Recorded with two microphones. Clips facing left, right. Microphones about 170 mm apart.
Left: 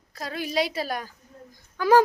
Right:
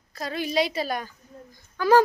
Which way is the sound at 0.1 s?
5° left (ahead or behind).